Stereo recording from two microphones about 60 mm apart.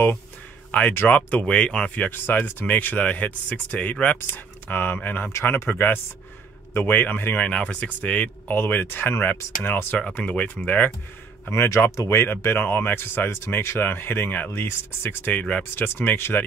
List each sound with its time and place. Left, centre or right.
0.7 s speech: left
1.4 s speech: centre
2.0 s speech: left
4.2 s speech: left
7.4 s speech: left
9.9 s speech: left
11.5 s speech: left
15.3 s speech: left
15.7 s speech: left